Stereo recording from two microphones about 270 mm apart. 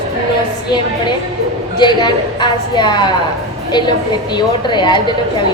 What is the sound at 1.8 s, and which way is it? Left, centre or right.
A woman's voice, centre.